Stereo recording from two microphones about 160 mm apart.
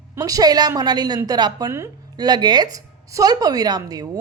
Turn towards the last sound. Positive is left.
turn(degrees=-25)  # may be behind; listen again after turning